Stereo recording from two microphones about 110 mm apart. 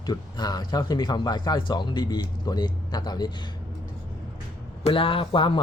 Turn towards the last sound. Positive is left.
turn(degrees=50)  # may be behind; listen again after turning